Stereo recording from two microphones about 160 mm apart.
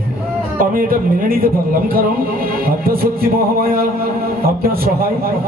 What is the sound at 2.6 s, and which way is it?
A man's voice, 65° right (ahead or behind).